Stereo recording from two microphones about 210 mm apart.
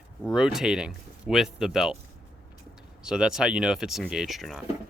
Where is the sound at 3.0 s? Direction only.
5° right (ahead or behind).